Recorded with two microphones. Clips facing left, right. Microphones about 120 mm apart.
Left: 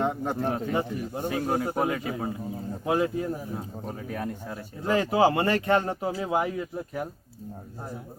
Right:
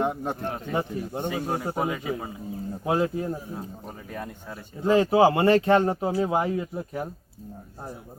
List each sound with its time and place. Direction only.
0.0 s speech: 15° right (ahead or behind)
1.3 s a man's voice: centre (ahead or behind)
2.8 s speech: 25° right (ahead or behind)
3.5 s a man's voice: centre (ahead or behind)
4.9 s speech: 25° right (ahead or behind)